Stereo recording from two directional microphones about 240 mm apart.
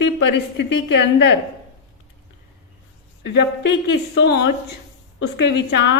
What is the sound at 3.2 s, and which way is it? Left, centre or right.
A woman's voice, left.